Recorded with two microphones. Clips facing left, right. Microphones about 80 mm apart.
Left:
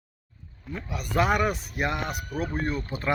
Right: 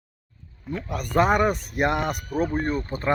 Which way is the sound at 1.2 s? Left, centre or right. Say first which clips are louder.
Right 4 dB; right.